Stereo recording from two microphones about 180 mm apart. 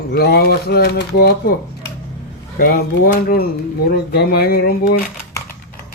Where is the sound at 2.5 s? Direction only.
60° left (ahead or behind).